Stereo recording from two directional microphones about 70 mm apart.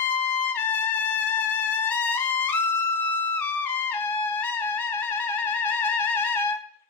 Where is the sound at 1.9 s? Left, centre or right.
Left.